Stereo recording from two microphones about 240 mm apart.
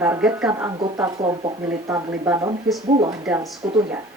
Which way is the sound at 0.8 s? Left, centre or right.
Centre.